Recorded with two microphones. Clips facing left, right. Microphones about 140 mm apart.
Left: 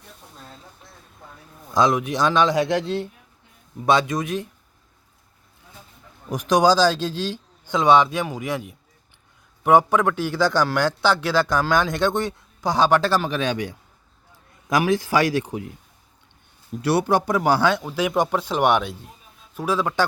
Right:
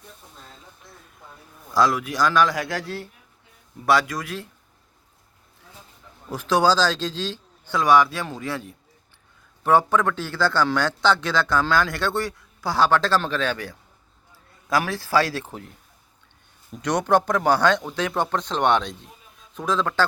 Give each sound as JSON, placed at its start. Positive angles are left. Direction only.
{"t": 1.7, "sound": "a man's voice", "side_deg": 20}
{"t": 6.3, "sound": "a man's voice", "side_deg": 15}
{"t": 16.7, "sound": "a man's voice", "side_deg": 10}